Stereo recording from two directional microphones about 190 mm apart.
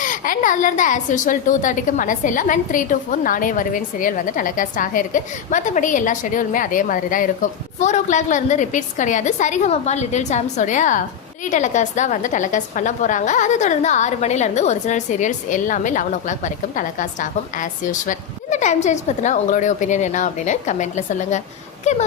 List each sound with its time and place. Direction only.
0.0 s a woman's voice: 45° left (ahead or behind)